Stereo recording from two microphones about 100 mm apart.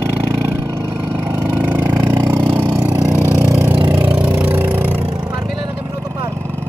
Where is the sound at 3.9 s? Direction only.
20° right (ahead or behind).